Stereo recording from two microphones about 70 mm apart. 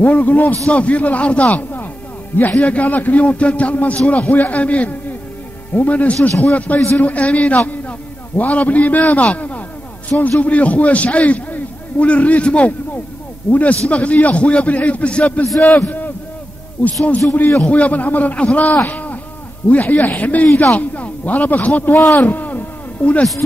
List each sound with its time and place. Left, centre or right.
0.0 s a man's voice: left
15.4 s a man's voice: centre
16.8 s a man's voice: left
18.9 s a sound: left
19.7 s a man's voice: left
21.9 s a man's voice: left
22.2 s music: left